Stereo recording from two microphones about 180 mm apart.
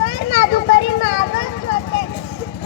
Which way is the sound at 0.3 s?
85° left.